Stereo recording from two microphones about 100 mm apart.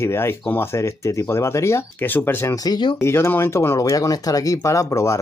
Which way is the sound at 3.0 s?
25° left (ahead or behind).